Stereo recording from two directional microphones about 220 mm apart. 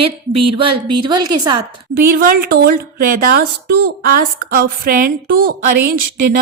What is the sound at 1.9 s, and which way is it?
A woman's voice, 45° right (ahead or behind).